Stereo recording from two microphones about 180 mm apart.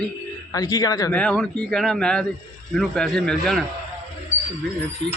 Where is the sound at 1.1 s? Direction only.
5° left (ahead or behind).